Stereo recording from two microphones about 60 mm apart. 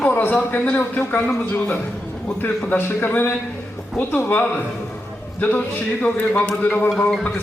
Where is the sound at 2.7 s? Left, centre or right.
Left.